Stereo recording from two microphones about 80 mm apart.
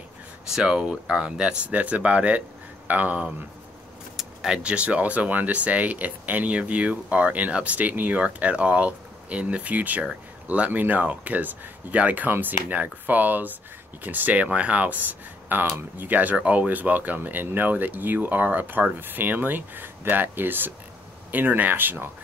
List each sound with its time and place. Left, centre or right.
0.5 s speech: centre; by 22.1 s right